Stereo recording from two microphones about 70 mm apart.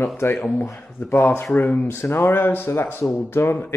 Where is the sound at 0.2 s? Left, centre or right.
Left.